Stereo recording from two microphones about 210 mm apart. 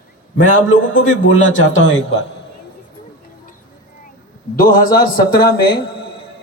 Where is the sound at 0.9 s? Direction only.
65° left (ahead or behind).